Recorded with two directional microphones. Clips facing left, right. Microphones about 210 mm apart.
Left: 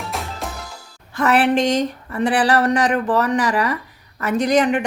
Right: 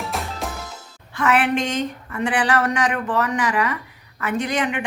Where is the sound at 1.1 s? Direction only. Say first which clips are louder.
Left 3 dB; 40° left (ahead or behind).